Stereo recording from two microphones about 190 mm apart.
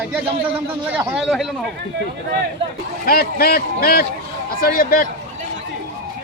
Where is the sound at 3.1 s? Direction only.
50° left (ahead or behind).